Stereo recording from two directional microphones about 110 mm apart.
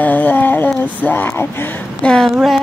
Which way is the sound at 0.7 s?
15° left (ahead or behind).